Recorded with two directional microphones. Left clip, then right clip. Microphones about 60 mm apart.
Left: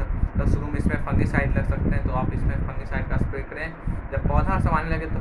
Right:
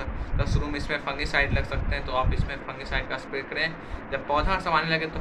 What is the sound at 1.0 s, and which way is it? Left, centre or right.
Speech, left.